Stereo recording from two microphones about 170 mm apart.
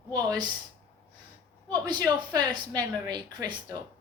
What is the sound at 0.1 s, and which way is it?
Speech, 25° right (ahead or behind).